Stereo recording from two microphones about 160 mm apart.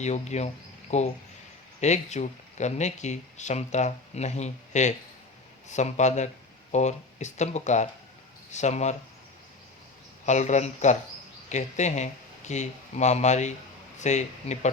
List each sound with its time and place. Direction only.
0.0 s speech: 45° left (ahead or behind)
10.2 s speech: 45° left (ahead or behind)